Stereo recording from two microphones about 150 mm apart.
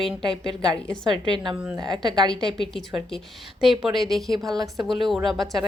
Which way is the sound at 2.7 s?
Centre (ahead or behind).